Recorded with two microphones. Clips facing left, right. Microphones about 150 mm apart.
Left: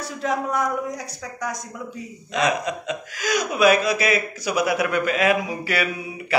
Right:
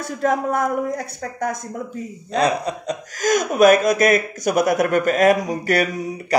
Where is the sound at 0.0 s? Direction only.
50° right (ahead or behind).